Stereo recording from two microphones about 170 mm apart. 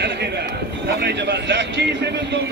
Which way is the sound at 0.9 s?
80° right.